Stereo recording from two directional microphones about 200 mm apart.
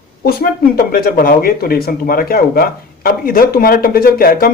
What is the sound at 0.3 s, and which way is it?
Speech, 50° left (ahead or behind).